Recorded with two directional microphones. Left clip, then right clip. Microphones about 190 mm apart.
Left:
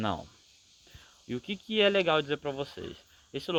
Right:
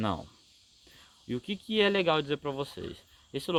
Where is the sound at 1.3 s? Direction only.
55° right (ahead or behind).